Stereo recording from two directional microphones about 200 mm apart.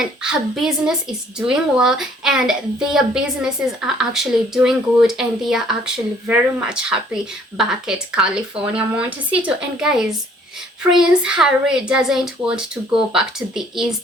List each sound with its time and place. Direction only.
0.0 s a woman's voice: 5° right (ahead or behind)